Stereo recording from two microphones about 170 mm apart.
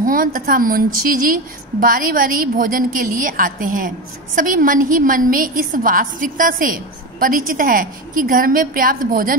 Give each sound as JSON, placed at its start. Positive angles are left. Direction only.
{"t": 0.0, "sound": "a woman's voice", "side_deg": -55}